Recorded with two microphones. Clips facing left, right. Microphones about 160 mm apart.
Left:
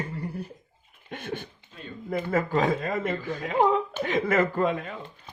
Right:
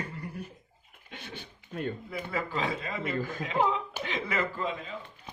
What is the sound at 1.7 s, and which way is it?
Speech, 55° right (ahead or behind).